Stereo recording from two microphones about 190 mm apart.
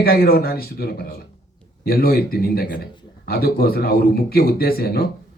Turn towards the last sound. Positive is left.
turn(degrees=55)  # may be behind; listen again after turning